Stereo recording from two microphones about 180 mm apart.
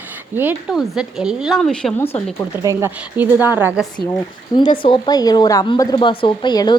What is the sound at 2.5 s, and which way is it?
A woman's voice, 15° right (ahead or behind).